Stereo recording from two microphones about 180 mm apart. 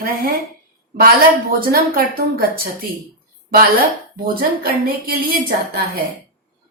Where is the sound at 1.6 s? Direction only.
55° right (ahead or behind).